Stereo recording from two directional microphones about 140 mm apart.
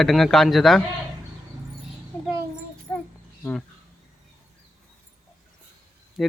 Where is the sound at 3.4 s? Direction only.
5° left (ahead or behind).